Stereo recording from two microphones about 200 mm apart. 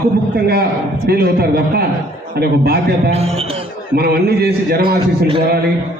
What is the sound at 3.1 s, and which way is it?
Speech, 30° right (ahead or behind).